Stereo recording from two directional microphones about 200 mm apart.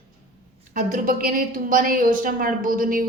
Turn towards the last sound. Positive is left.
turn(degrees=-45)  # may be behind; listen again after turning